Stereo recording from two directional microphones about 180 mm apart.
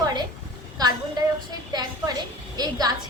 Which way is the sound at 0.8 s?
20° right (ahead or behind).